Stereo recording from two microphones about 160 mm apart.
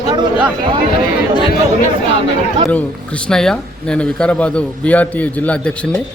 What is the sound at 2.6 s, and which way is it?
A man's voice, 5° left (ahead or behind).